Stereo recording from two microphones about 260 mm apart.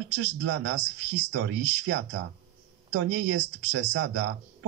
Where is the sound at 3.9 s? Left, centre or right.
Right.